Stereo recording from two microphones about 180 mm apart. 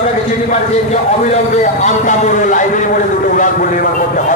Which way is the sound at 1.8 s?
40° left (ahead or behind).